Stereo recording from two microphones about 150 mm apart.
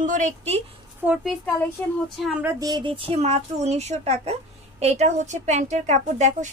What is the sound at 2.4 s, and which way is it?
A woman's voice, 25° right (ahead or behind).